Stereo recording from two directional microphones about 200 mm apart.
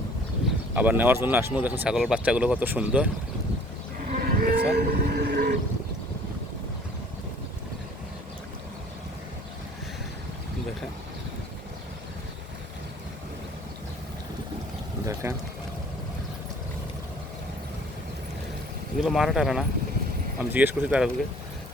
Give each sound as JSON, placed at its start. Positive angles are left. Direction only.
{"t": 0.8, "sound": "speech", "side_deg": -10}
{"t": 4.1, "sound": "livestock", "side_deg": -50}
{"t": 15.0, "sound": "a sound", "side_deg": -15}
{"t": 19.0, "sound": "speech", "side_deg": 0}